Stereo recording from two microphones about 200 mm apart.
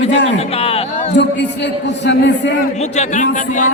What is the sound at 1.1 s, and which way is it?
A man's voice, 60° left (ahead or behind).